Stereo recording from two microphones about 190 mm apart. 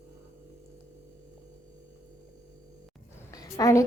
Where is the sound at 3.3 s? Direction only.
15° left (ahead or behind).